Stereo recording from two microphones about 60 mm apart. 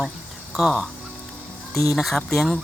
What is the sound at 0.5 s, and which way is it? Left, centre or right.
Speech, centre.